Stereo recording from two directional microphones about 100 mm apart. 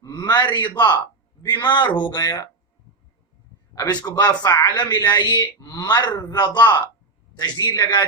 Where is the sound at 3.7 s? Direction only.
45° left (ahead or behind).